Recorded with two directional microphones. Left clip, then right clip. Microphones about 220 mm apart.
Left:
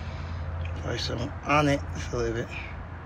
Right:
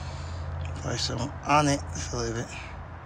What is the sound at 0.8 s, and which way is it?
Speech, 20° right (ahead or behind).